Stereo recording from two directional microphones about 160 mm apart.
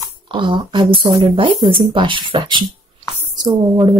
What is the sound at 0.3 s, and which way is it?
A woman's voice, 30° right (ahead or behind).